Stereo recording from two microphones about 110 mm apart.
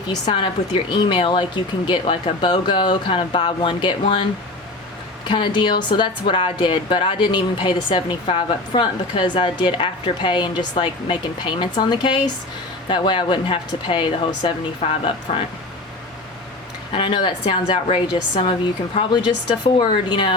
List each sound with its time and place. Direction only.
0.1 s a woman's voice: 40° left (ahead or behind)
5.3 s speech: 45° left (ahead or behind)
16.9 s speech: 50° left (ahead or behind)